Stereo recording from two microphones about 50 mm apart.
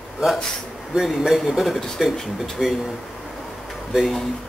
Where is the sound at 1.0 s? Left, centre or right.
Centre.